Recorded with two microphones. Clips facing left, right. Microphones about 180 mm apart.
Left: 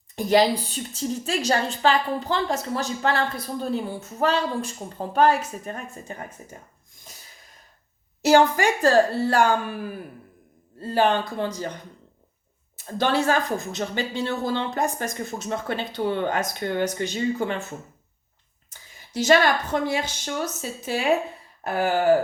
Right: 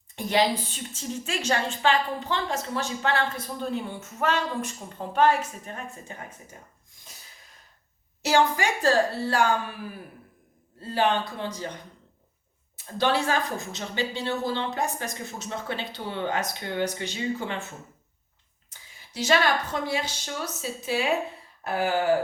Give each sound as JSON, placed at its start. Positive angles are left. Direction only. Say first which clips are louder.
{"t": 0.2, "sound": "a woman's voice", "louder": "left 5 dB", "side_deg": 40}
{"t": 8.2, "sound": "speech", "louder": "left 5 dB", "side_deg": 45}
{"t": 10.8, "sound": "speech", "louder": "left 3 dB", "side_deg": 40}
{"t": 13.7, "sound": "speech", "louder": "left 3 dB", "side_deg": 50}
{"t": 19.1, "sound": "speech", "louder": "left 4 dB", "side_deg": 50}